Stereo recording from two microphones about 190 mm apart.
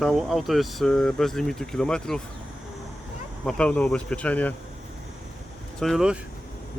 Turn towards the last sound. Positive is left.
turn(degrees=0)  # may be behind; listen again after turning